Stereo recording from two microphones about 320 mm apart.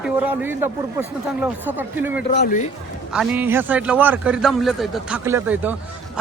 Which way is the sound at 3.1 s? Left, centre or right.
Centre.